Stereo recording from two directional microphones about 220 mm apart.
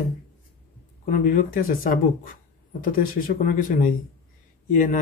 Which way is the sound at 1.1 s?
40° left (ahead or behind).